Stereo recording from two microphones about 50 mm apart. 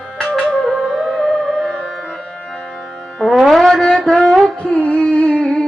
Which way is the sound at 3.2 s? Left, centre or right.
Centre.